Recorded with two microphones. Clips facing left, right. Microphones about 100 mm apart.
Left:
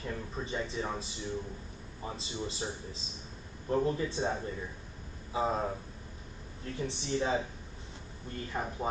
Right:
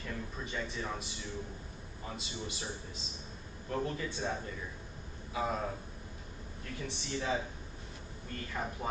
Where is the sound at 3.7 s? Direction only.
30° left (ahead or behind).